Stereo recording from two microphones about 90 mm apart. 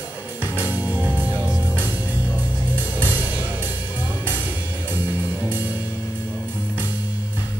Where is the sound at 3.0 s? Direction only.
20° right (ahead or behind).